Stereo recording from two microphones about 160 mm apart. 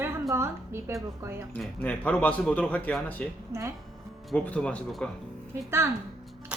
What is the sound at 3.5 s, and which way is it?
Speech, 15° right (ahead or behind).